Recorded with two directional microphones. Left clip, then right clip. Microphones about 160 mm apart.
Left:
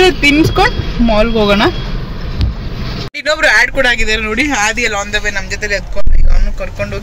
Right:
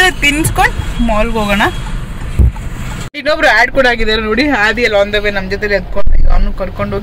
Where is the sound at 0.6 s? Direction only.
50° right (ahead or behind).